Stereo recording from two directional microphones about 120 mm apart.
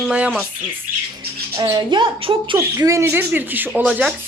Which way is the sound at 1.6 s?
35° right (ahead or behind).